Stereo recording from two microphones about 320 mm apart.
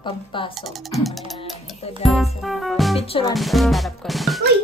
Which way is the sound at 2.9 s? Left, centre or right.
Centre.